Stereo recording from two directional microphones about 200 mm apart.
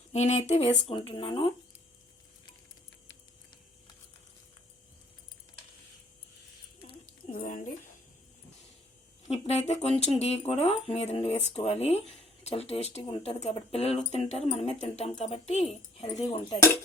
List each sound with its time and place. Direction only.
0.1 s speech: 35° left (ahead or behind)
7.3 s a sound: 40° left (ahead or behind)
9.2 s speech: 35° left (ahead or behind)